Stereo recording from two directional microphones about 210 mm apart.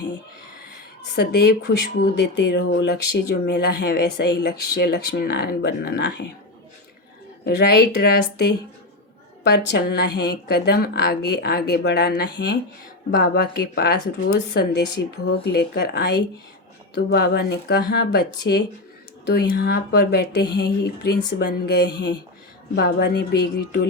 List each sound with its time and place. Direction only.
1.1 s speech: 50° left (ahead or behind)
7.4 s speech: 50° left (ahead or behind)